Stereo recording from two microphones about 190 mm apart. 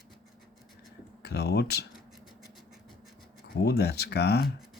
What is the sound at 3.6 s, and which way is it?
Speech, 60° left (ahead or behind).